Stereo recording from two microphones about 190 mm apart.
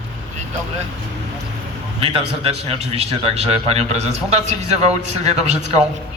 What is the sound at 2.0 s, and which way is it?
A man's voice, 30° right (ahead or behind).